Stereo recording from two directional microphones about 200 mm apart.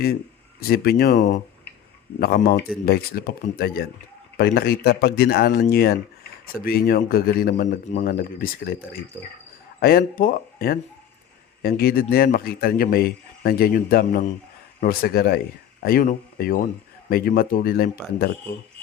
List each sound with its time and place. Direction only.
0.7 s a man's voice: 50° left (ahead or behind)